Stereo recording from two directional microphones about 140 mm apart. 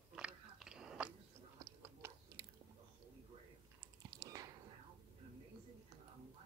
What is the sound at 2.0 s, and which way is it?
Biting, 20° right (ahead or behind).